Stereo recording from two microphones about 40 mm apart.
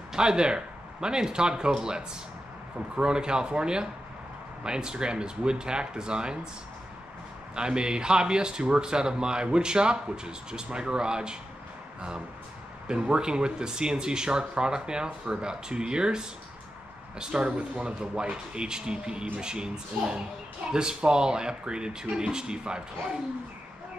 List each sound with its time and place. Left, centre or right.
0.1 s a man's voice: centre
7.5 s a man's voice: right
12.8 s a man's voice: right